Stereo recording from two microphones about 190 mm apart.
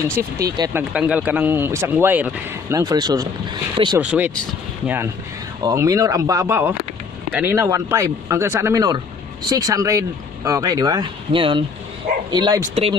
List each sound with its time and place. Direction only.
0.2 s speech: 10° right (ahead or behind)
2.8 s speech: 20° right (ahead or behind)
4.0 s speech: 5° right (ahead or behind); by 12.9 s 25° right (ahead or behind)